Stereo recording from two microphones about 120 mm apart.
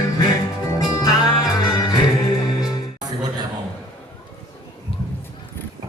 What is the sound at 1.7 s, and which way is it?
Music, 30° left (ahead or behind).